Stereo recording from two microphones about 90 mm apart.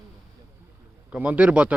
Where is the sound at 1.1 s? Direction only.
15° right (ahead or behind).